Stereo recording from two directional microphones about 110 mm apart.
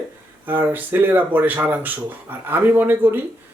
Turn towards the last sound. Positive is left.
turn(degrees=-20)  # may be behind; listen again after turning